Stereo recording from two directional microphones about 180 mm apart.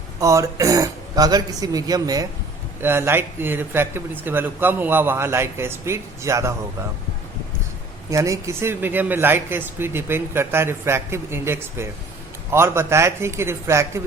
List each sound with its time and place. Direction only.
0.2 s speech: 15° right (ahead or behind)
8.1 s speech: 15° right (ahead or behind)